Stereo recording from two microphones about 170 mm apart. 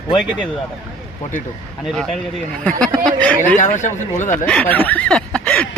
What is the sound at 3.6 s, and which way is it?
Speech, 45° left (ahead or behind).